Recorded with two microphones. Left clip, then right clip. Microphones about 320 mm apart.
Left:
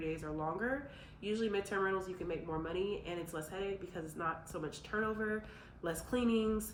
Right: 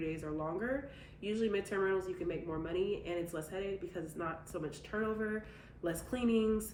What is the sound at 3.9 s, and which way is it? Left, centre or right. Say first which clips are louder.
Speech: left 1 dB; centre.